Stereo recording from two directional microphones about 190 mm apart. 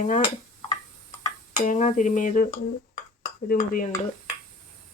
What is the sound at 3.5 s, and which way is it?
Dishes, 45° left (ahead or behind).